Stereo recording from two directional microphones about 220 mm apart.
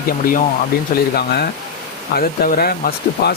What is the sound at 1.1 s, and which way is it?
Speech, 45° left (ahead or behind).